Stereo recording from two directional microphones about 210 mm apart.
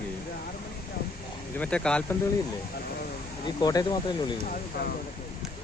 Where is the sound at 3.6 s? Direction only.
20° left (ahead or behind).